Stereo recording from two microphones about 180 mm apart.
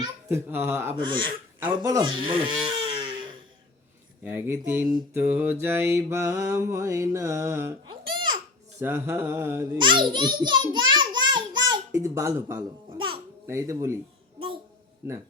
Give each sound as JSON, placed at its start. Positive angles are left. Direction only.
{"t": 0.0, "sound": "mantra", "side_deg": -10}
{"t": 1.0, "sound": "speech", "side_deg": -25}
{"t": 1.5, "sound": "speech", "side_deg": -15}
{"t": 2.6, "sound": "a sound", "side_deg": -25}
{"t": 4.2, "sound": "mantra", "side_deg": -10}
{"t": 8.8, "sound": "mantra", "side_deg": -15}
{"t": 9.7, "sound": "a child's voice", "side_deg": -25}
{"t": 13.5, "sound": "mantra", "side_deg": -15}
{"t": 15.0, "sound": "mantra", "side_deg": -15}